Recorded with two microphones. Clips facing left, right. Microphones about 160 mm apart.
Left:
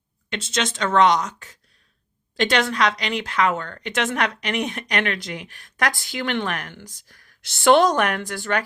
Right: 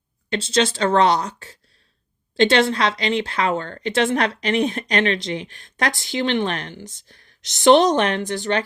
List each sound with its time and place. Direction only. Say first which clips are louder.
0.3 s a woman's voice: right 6 dB; 30° right (ahead or behind)